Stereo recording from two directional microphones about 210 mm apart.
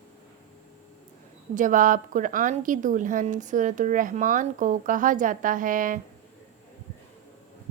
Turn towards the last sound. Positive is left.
turn(degrees=-40)  # may be behind; listen again after turning